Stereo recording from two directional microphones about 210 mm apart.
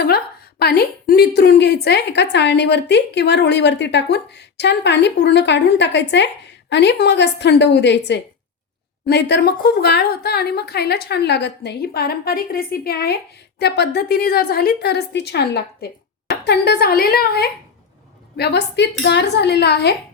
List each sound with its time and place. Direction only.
0.6 s a woman's voice: 50° left (ahead or behind)